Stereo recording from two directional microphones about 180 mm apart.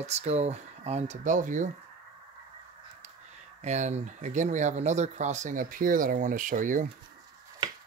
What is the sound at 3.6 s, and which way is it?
Speech, 40° right (ahead or behind).